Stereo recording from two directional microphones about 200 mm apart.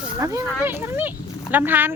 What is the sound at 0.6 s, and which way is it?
Speech, 10° right (ahead or behind).